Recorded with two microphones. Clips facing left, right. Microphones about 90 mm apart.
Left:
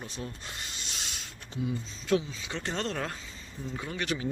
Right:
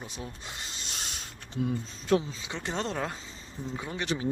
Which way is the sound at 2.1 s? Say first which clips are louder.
Right 2 dB; 35° right (ahead or behind).